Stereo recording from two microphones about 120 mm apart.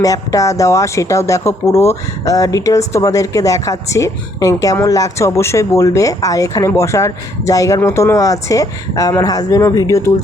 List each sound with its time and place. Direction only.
0.0 s speech: 30° left (ahead or behind)